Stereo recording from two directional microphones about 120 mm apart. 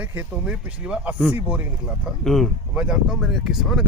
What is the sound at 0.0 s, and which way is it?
Speech, 15° right (ahead or behind).